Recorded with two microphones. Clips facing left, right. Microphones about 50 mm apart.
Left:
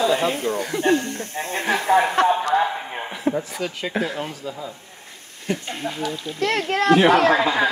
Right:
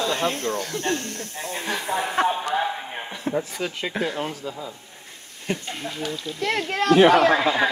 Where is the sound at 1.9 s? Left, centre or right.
Left.